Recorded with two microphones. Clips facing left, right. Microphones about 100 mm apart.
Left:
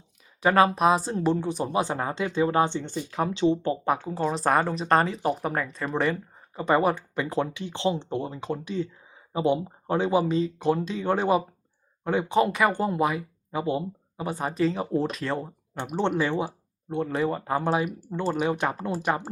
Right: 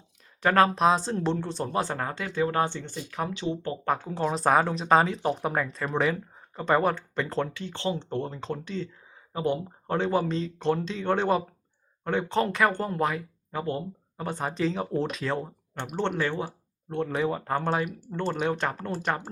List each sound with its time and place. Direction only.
0.4 s speech: 5° left (ahead or behind); by 3.8 s 25° left (ahead or behind)
3.9 s speech: centre (ahead or behind)